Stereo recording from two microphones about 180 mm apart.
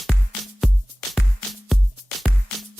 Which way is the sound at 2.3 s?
90° left.